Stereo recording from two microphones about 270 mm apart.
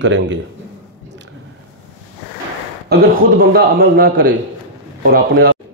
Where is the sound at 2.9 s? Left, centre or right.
Right.